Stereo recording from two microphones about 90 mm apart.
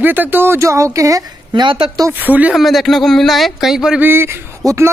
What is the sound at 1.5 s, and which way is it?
Speech, 65° right (ahead or behind).